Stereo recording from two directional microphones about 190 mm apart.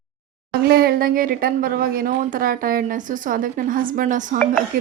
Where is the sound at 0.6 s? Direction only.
55° right (ahead or behind).